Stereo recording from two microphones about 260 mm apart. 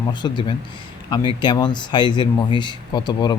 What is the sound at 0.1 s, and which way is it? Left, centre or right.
Speech, centre.